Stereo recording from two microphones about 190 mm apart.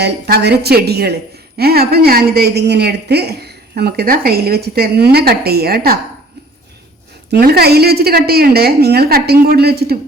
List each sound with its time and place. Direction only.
0.0 s a woman's voice: 60° right (ahead or behind)
7.3 s a woman's voice: 60° right (ahead or behind)